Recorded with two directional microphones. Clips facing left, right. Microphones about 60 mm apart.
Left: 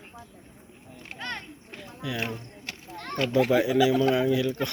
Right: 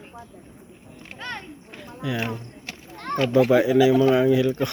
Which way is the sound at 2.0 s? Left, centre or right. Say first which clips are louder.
Right 5 dB; right.